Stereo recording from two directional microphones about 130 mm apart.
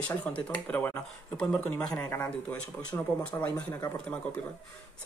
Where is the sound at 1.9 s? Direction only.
25° left (ahead or behind).